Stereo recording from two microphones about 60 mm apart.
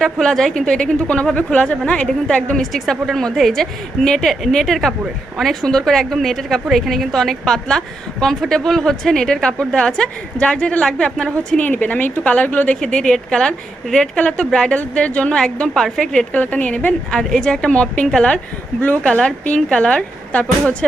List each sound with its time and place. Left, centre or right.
0.0 s a woman's voice: centre; by 12.8 s left
12.8 s a woman's voice: centre
16.3 s a woman's voice: left